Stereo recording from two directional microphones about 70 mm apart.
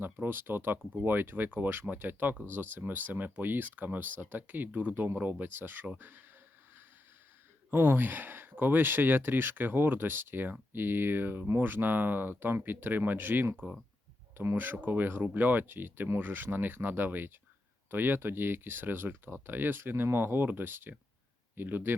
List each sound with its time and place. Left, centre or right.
0.0 s speech: right
7.7 s speech: right